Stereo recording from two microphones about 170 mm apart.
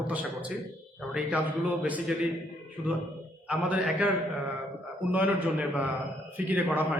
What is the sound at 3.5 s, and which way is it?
A man's voice, 10° right (ahead or behind).